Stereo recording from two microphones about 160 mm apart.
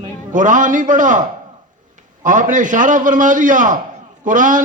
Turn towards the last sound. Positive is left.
turn(degrees=-55)  # may be behind; listen again after turning